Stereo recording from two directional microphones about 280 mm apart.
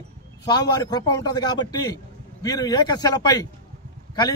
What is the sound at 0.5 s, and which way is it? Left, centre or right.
Speech, centre.